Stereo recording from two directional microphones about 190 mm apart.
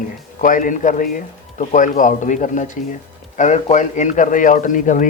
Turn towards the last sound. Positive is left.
turn(degrees=45)  # may be behind; listen again after turning